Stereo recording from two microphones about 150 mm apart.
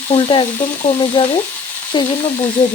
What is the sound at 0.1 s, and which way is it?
Frying, 35° left (ahead or behind).